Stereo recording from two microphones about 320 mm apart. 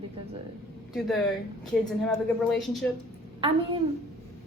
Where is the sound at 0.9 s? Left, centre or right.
Centre.